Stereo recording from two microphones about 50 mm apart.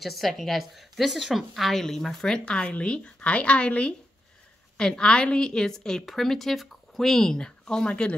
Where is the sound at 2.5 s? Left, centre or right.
Left.